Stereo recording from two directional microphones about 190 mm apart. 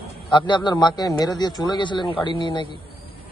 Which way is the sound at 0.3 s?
25° left (ahead or behind).